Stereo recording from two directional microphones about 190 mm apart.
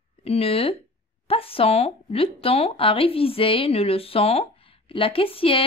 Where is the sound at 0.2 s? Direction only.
30° left (ahead or behind).